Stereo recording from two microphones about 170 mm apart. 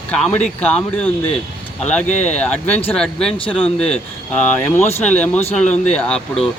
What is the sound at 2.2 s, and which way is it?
Speech, 10° left (ahead or behind).